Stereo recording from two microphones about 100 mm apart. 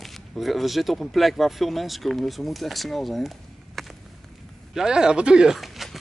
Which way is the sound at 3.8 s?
Centre (ahead or behind).